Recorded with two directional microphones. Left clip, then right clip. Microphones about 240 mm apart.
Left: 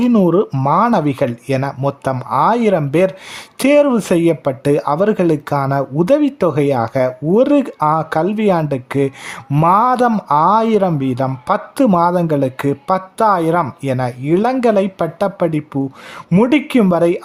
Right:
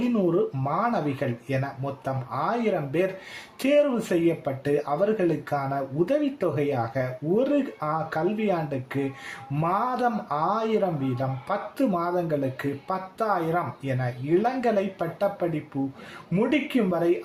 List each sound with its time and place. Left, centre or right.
0.1 s speech: left